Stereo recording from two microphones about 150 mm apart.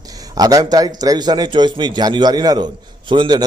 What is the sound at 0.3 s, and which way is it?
A man's voice, 25° right (ahead or behind).